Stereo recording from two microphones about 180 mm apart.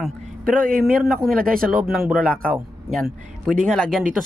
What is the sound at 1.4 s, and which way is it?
Speech, 50° right (ahead or behind).